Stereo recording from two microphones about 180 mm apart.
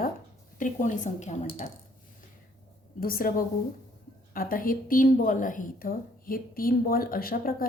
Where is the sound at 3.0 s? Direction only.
55° left (ahead or behind).